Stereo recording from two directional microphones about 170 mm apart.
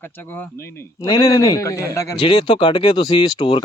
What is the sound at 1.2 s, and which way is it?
Speech, 20° left (ahead or behind).